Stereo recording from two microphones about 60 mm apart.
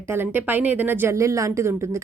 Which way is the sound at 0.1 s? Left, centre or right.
Right.